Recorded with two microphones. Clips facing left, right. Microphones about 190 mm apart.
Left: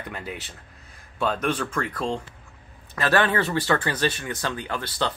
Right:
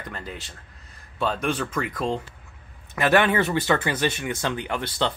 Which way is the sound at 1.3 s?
10° right (ahead or behind).